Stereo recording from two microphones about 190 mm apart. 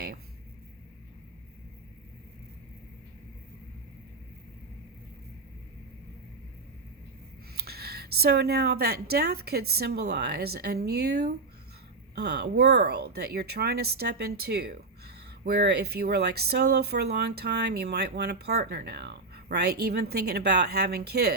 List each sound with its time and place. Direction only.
7.5 s speech: 55° right (ahead or behind)